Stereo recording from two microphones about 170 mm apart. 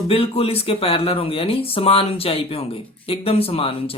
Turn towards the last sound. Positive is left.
turn(degrees=35)  # may be behind; listen again after turning